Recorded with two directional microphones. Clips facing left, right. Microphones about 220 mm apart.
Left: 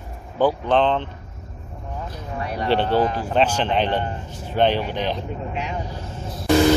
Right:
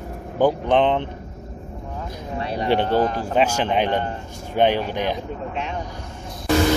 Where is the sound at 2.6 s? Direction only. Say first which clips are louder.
Even; 15° right (ahead or behind).